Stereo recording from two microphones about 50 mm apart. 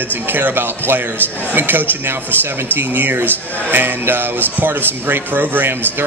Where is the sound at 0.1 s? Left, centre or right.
Right.